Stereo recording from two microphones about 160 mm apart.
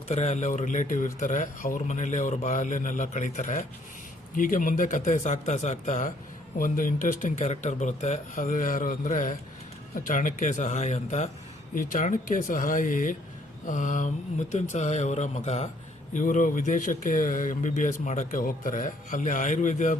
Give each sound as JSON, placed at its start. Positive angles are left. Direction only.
{"t": 0.1, "sound": "speech", "side_deg": 45}